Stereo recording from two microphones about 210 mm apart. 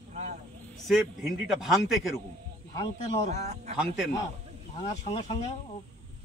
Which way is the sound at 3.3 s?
30° right (ahead or behind).